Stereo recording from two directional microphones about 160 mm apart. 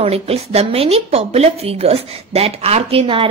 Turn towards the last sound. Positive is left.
turn(degrees=-35)  # may be behind; listen again after turning